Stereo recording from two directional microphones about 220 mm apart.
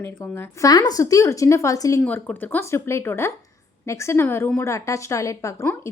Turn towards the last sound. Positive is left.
turn(degrees=10)  # may be behind; listen again after turning